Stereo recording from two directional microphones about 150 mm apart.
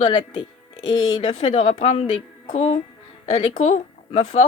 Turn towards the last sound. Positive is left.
turn(degrees=45)  # may be behind; listen again after turning